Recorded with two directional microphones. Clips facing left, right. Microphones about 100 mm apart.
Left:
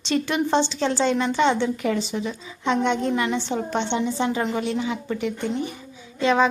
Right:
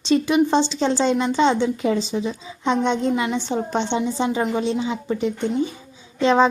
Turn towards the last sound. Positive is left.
turn(degrees=-30)  # may be behind; listen again after turning